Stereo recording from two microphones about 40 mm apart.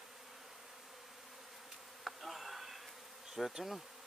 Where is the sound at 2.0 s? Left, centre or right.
Centre.